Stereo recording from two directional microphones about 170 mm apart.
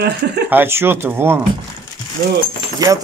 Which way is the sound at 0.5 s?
15° right (ahead or behind).